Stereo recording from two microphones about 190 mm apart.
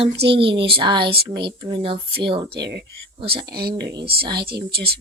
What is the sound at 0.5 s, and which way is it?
Speech, 30° right (ahead or behind).